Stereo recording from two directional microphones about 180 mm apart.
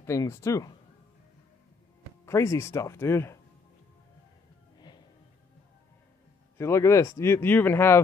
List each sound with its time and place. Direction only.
0.0 s speech: 15° left (ahead or behind)
2.2 s speech: 15° left (ahead or behind)
4.7 s music: 25° left (ahead or behind)
6.6 s speech: 15° left (ahead or behind)